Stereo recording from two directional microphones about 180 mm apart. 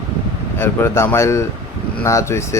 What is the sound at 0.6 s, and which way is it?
Speech, 15° left (ahead or behind).